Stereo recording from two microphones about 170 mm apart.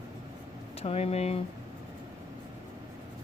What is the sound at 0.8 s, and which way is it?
Speech, 35° left (ahead or behind).